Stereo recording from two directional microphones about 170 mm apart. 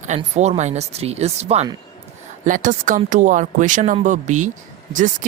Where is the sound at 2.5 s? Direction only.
50° right (ahead or behind).